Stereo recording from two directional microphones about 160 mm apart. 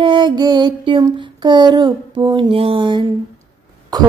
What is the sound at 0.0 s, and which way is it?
Music, 30° right (ahead or behind).